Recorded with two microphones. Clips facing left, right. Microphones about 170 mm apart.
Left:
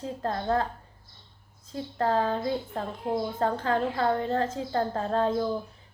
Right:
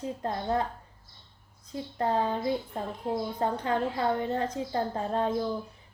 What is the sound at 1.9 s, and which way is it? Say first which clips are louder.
A woman's voice: left 2 dB; 20° right (ahead or behind).